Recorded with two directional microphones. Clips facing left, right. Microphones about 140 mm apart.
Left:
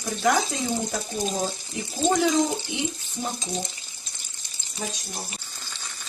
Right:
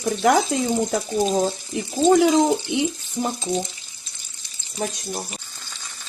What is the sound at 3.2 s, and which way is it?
Speech, 65° right (ahead or behind).